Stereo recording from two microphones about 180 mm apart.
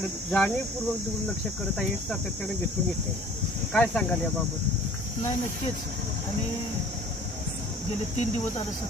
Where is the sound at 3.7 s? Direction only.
5° left (ahead or behind).